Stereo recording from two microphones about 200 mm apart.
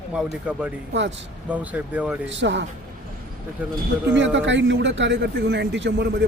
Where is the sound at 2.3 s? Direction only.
65° right (ahead or behind).